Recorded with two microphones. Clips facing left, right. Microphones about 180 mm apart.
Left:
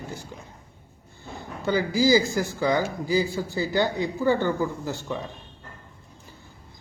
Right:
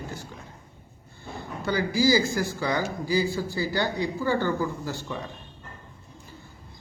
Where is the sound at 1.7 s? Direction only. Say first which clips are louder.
Left 2 dB; 20° left (ahead or behind).